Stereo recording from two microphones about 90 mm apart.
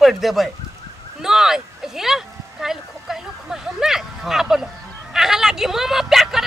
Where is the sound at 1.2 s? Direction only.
5° right (ahead or behind).